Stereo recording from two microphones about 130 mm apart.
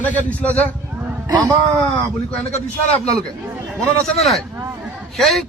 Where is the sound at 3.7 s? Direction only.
Centre (ahead or behind).